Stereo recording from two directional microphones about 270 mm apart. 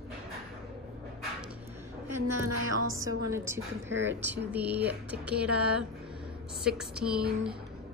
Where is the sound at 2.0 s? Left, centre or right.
Centre.